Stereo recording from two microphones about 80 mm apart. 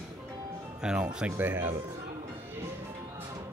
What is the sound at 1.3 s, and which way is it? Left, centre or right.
Speech, right.